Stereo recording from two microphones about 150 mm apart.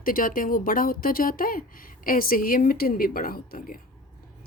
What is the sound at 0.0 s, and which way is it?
Speech, 65° left (ahead or behind).